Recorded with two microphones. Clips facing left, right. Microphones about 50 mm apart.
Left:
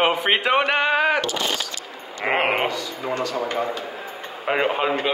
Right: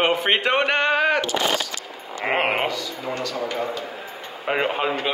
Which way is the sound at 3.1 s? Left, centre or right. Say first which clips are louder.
Left 3 dB; left.